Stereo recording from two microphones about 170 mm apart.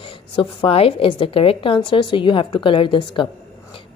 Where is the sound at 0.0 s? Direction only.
30° left (ahead or behind).